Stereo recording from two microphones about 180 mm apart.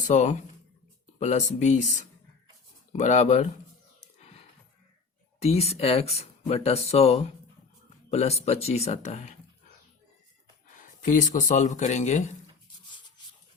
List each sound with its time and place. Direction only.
0.1 s speech: 40° left (ahead or behind)
4.2 s a sound: 35° left (ahead or behind)
5.4 s speech: 35° left (ahead or behind)
10.7 s speech: 45° left (ahead or behind)